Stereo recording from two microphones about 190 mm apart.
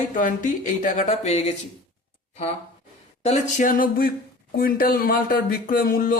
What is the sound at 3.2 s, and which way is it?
Speech, 40° left (ahead or behind).